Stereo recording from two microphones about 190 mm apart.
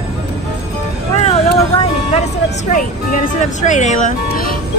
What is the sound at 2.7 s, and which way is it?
Speech, 40° left (ahead or behind).